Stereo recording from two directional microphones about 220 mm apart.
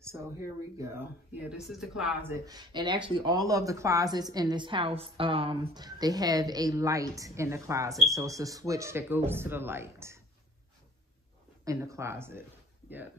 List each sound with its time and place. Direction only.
0.7 s speech: 10° right (ahead or behind)
2.3 s speech: 15° right (ahead or behind)
11.6 s speech: 15° right (ahead or behind)